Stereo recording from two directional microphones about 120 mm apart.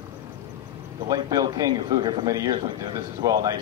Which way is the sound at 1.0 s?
30° right (ahead or behind).